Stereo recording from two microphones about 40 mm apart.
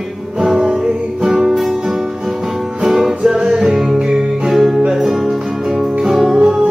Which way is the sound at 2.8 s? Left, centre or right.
Centre.